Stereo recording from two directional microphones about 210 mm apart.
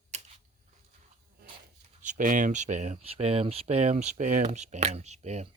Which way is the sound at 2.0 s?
40° right (ahead or behind).